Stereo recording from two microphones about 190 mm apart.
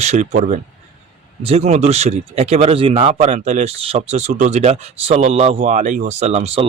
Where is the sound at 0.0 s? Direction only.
35° right (ahead or behind).